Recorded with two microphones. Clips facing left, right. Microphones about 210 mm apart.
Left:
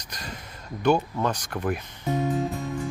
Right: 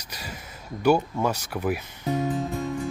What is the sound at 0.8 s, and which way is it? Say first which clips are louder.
Speech: right 1 dB; 10° right (ahead or behind).